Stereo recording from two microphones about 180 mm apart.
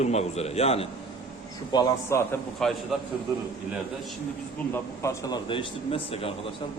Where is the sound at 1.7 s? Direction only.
20° left (ahead or behind).